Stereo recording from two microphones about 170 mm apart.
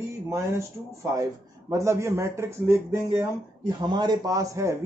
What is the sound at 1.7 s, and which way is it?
Speech, 15° right (ahead or behind).